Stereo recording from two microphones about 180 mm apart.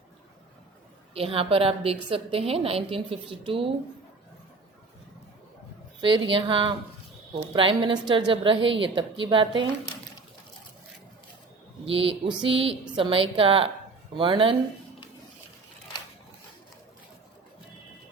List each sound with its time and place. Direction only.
1.1 s a woman's voice: 30° right (ahead or behind)
6.0 s a woman's voice: 30° right (ahead or behind)
11.9 s a woman's voice: 30° right (ahead or behind)